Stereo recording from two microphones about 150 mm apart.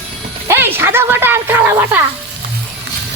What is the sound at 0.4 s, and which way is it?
Speech, 15° right (ahead or behind).